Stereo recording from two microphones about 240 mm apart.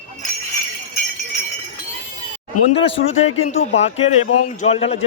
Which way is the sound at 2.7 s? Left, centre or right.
Left.